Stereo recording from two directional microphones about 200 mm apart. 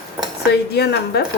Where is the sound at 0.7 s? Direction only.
55° left (ahead or behind).